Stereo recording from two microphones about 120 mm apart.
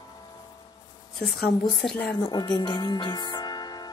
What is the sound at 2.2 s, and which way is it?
Speech, 35° left (ahead or behind).